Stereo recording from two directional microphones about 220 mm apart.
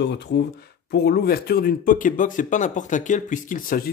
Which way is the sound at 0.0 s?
50° left (ahead or behind).